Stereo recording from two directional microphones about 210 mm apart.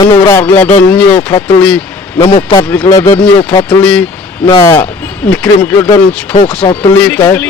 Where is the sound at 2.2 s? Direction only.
25° left (ahead or behind).